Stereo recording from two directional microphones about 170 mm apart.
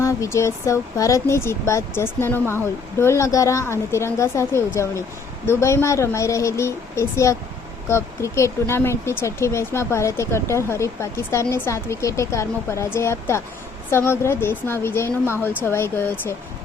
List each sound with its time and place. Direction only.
0.0 s speech: 20° left (ahead or behind)